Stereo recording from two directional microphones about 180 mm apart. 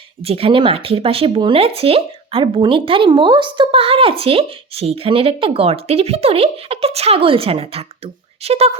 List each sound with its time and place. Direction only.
0.2 s speech: 30° right (ahead or behind)